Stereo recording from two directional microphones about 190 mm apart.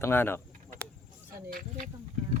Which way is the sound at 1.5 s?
45° right (ahead or behind).